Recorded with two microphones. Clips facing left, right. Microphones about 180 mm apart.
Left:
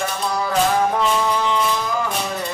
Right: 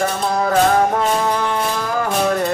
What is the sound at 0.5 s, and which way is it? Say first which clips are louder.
Music: right 3 dB; 50° right (ahead or behind).